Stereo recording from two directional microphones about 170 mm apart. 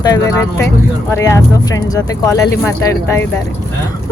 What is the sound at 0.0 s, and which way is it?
Speech, 25° left (ahead or behind).